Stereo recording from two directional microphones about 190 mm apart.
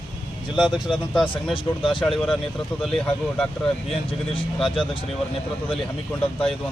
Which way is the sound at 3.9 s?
30° left (ahead or behind).